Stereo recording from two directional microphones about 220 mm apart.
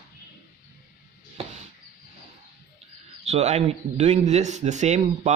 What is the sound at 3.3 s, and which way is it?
Speech, 30° right (ahead or behind).